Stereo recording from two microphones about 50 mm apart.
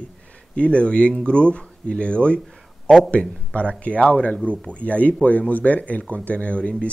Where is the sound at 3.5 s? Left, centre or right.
Left.